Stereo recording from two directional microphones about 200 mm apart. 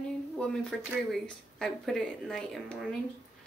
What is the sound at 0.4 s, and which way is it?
Speech, 5° left (ahead or behind).